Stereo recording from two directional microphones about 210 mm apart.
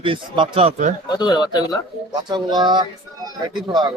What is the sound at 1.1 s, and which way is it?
Speech, 20° left (ahead or behind).